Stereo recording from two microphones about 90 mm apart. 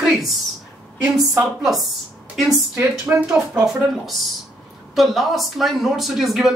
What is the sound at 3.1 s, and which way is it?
Speech, 20° right (ahead or behind).